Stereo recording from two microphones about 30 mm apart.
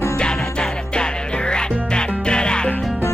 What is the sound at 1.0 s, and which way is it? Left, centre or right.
Music, left.